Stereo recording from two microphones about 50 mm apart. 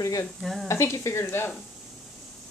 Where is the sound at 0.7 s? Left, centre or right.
Left.